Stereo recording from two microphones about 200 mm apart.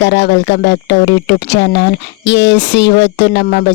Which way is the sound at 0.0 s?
60° left (ahead or behind).